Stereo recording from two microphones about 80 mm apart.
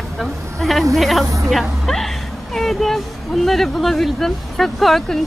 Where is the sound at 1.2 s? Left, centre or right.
Right.